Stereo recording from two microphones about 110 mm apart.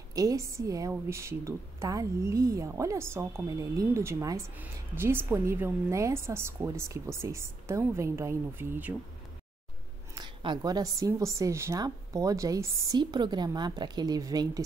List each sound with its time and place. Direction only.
0.1 s a woman's voice: 30° right (ahead or behind)
10.1 s a woman's voice: 45° right (ahead or behind)